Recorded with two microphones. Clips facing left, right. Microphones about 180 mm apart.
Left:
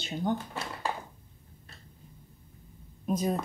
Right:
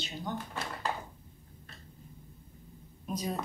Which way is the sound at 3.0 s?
50° left (ahead or behind).